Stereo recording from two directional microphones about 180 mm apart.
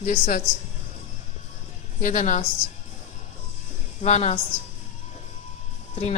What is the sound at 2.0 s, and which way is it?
Speech, 45° left (ahead or behind).